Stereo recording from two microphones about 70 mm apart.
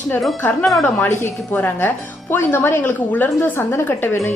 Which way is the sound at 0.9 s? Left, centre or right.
Left.